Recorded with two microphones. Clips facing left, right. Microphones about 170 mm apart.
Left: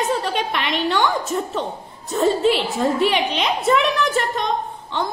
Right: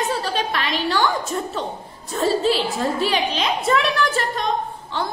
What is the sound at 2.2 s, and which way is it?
Speech, 20° left (ahead or behind).